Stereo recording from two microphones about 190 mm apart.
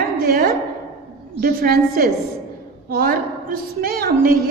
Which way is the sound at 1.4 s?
50° right (ahead or behind).